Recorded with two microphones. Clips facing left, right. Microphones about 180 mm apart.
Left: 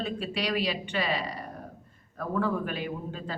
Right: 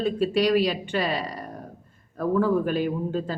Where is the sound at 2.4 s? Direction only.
40° right (ahead or behind).